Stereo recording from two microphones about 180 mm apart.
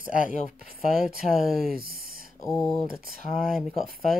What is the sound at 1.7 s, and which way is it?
Speech, 55° right (ahead or behind).